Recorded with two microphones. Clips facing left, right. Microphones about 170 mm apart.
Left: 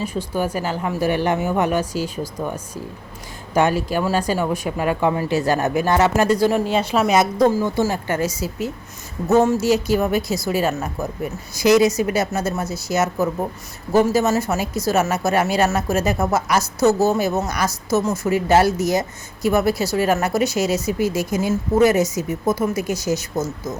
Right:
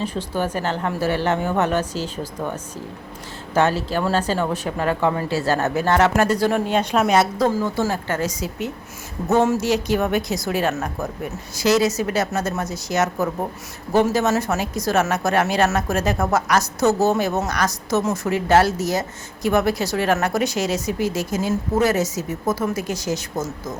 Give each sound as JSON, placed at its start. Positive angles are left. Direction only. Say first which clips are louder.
{"t": 0.0, "sound": "a woman's voice", "louder": "left 1 dB", "side_deg": 10}
{"t": 13.9, "sound": "a woman's voice", "louder": "left 1 dB", "side_deg": 5}
{"t": 16.8, "sound": "a woman's voice", "louder": "left 2 dB", "side_deg": -15}
{"t": 17.2, "sound": "speech", "louder": "left 1 dB", "side_deg": 5}